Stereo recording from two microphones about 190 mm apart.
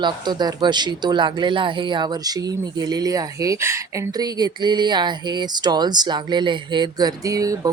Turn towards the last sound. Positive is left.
turn(degrees=-20)  # may be behind; listen again after turning